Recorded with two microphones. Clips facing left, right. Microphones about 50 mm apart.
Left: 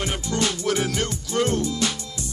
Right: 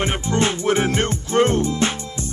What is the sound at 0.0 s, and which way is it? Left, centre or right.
Music, right.